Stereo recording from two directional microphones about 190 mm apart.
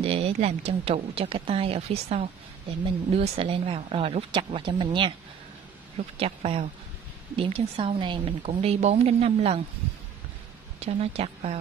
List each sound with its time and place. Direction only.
0.0 s speech: 30° right (ahead or behind)
6.1 s speech: 30° right (ahead or behind)
10.8 s speech: 30° right (ahead or behind)